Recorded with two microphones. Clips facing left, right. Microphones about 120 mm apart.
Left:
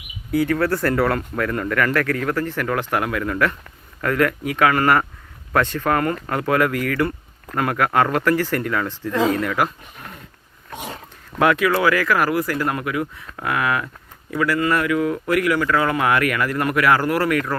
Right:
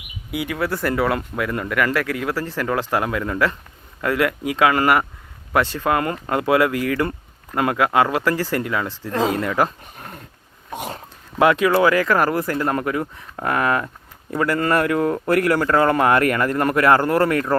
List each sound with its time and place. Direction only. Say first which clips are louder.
0.3 s speech: left 5 dB; 10° right (ahead or behind)
2.6 s speech: right 1 dB; 20° right (ahead or behind)
9.6 s speech: right 2 dB; 30° right (ahead or behind)
11.3 s speech: right 2 dB; 20° right (ahead or behind)